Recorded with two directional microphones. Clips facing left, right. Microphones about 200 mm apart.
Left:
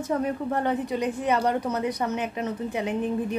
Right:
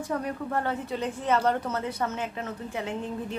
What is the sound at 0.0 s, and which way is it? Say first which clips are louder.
A woman's voice: left 4 dB; 20° left (ahead or behind).